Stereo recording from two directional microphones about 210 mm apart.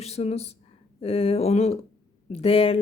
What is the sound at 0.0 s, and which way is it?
A woman's voice, 30° left (ahead or behind).